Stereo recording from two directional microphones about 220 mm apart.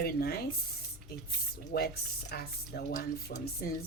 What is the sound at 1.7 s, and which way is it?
Speech, 45° left (ahead or behind).